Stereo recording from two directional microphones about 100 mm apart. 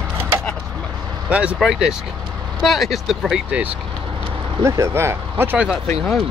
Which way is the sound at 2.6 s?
Centre (ahead or behind).